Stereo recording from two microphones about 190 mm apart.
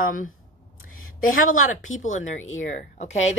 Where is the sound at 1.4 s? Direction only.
90° left.